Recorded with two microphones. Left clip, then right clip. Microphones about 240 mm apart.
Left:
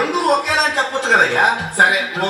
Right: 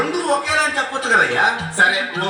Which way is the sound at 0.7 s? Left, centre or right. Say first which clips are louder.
Left 2 dB; right.